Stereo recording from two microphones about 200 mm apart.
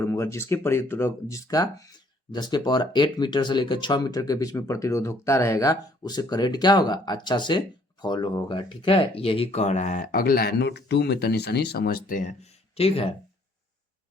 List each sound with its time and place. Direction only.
0.0 s speech: 15° left (ahead or behind); by 13.1 s 30° left (ahead or behind)